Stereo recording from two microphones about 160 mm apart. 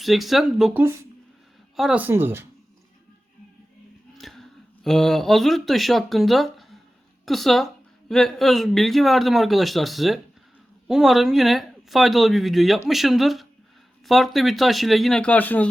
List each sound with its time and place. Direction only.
0.0 s speech: centre (ahead or behind)
0.7 s speech: 15° right (ahead or behind)
1.7 s speech: 5° right (ahead or behind)
4.2 s speech: centre (ahead or behind)